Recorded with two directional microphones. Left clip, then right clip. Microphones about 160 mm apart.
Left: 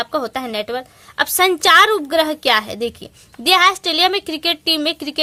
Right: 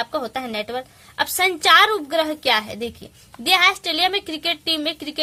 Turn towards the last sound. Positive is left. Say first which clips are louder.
# left 5 dB
turn(degrees=40)  # may be behind; listen again after turning